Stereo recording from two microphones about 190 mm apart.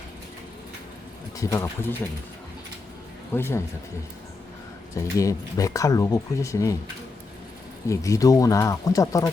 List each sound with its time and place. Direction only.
1.4 s speech: 15° left (ahead or behind)
3.3 s speech: 10° left (ahead or behind)
5.1 s speech: 15° left (ahead or behind)
7.9 s speech: 15° left (ahead or behind)